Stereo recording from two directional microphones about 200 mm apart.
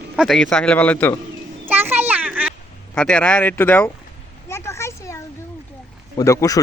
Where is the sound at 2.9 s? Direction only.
5° left (ahead or behind).